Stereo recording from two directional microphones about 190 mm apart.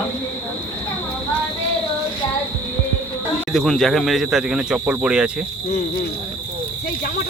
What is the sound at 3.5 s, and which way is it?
Speech, centre (ahead or behind).